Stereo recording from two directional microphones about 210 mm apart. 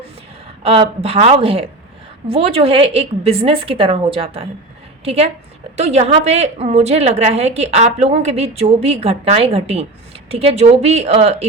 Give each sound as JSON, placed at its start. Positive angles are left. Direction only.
{"t": 0.6, "sound": "a woman's voice", "side_deg": -30}